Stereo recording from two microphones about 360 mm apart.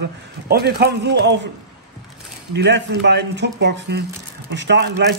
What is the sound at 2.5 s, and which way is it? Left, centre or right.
A man's voice, right.